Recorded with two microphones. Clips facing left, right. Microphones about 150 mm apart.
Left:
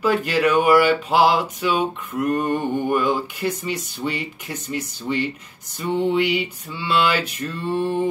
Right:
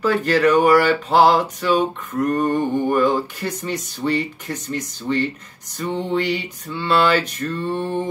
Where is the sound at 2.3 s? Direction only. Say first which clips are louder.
Right 2 dB; 10° left (ahead or behind).